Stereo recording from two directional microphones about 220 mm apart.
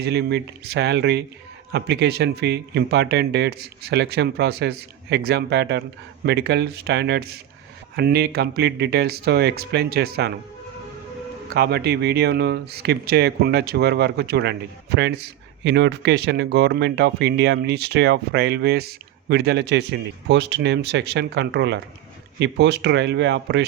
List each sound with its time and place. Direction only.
0.0 s speech: 50° right (ahead or behind)
11.5 s speech: 50° right (ahead or behind)